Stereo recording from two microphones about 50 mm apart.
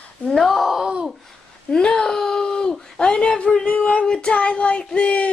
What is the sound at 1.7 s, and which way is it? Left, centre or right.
Speech, centre.